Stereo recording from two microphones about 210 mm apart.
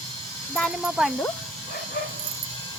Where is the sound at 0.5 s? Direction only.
Centre (ahead or behind).